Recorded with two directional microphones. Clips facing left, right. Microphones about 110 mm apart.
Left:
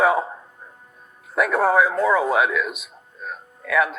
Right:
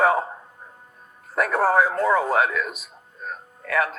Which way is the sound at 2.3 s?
45° right (ahead or behind).